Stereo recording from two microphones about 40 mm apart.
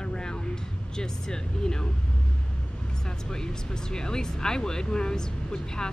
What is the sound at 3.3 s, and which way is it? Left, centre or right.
Speech, centre.